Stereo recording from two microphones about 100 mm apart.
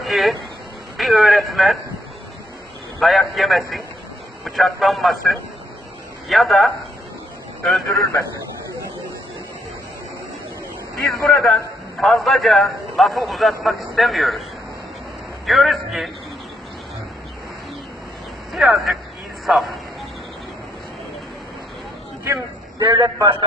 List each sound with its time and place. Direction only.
0.0 s a sound: centre (ahead or behind)
0.9 s a man's voice: centre (ahead or behind)
3.0 s a man's voice: centre (ahead or behind)
11.1 s a man's voice: 5° left (ahead or behind)
15.4 s a man's voice: centre (ahead or behind)
18.5 s a man's voice: centre (ahead or behind)
22.8 s a man's voice: 40° right (ahead or behind)